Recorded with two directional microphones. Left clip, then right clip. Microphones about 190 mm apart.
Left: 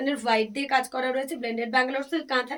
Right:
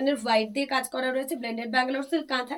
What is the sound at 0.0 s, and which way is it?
A woman's voice, 15° left (ahead or behind).